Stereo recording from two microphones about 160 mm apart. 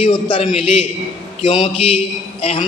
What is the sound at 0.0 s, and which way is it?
A man's voice, 35° left (ahead or behind).